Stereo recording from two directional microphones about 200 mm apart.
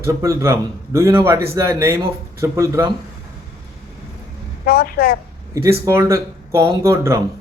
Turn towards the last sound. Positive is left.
turn(degrees=-15)  # may be behind; listen again after turning